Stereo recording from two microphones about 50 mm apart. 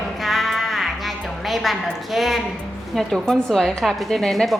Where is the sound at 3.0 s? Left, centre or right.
Centre.